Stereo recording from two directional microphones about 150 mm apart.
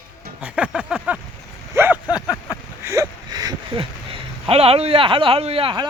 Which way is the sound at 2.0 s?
25° left (ahead or behind).